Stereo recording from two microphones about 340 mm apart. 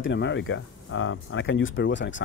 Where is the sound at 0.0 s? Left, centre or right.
Left.